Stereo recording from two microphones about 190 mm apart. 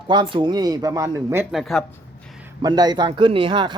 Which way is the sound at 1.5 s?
Centre (ahead or behind).